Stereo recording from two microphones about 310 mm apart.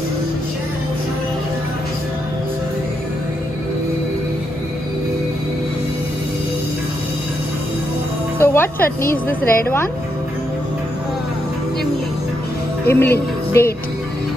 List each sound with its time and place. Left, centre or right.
8.4 s music: centre
9.0 s a woman's voice: left
12.8 s speech: centre